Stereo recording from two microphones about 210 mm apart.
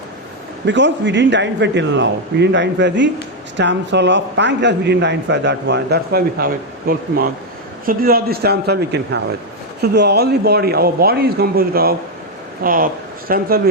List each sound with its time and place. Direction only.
0.6 s a man's voice: 60° right (ahead or behind); by 13.6 s 45° right (ahead or behind)